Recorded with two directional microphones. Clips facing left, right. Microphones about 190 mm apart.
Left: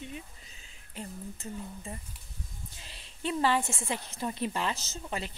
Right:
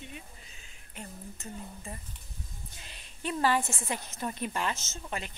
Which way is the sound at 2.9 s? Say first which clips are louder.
Left 2 dB; 25° left (ahead or behind).